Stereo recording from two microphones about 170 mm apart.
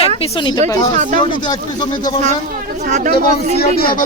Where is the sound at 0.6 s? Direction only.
20° left (ahead or behind).